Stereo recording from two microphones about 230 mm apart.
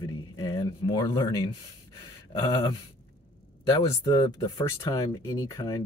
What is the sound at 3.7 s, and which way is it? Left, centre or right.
Speech, centre.